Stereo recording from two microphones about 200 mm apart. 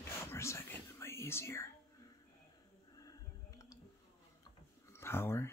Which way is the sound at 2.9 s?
15° left (ahead or behind).